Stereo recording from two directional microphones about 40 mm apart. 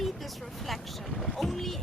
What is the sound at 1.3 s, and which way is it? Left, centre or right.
Speech, centre.